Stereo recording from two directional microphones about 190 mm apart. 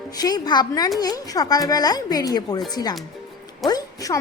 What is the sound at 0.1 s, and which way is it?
Speech, 20° left (ahead or behind).